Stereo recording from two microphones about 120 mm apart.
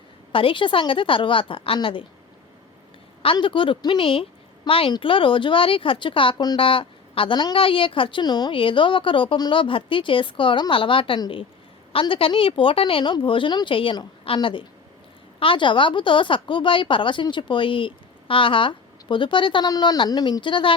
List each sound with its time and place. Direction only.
0.3 s speech: 45° left (ahead or behind)
3.3 s speech: 45° left (ahead or behind)
6.3 s speech: 35° left (ahead or behind)
6.6 s speech: 50° left (ahead or behind)